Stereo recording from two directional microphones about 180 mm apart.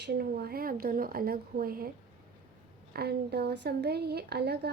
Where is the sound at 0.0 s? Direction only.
60° right (ahead or behind).